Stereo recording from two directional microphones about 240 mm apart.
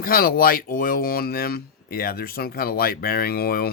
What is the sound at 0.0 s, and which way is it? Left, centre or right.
Speech, left.